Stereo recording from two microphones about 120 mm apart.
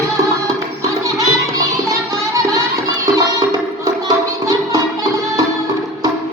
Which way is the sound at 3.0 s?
25° right (ahead or behind).